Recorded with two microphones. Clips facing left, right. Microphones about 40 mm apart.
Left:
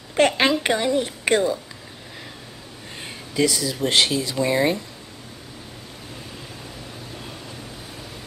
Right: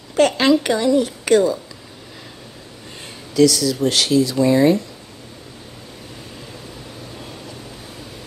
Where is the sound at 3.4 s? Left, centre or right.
Left.